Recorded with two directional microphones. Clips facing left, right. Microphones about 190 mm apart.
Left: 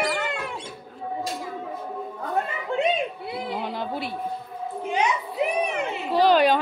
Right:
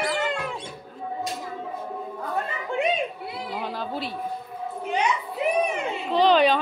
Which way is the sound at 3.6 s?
15° left (ahead or behind).